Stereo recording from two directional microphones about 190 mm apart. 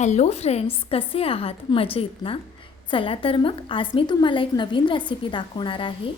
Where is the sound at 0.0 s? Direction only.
35° left (ahead or behind).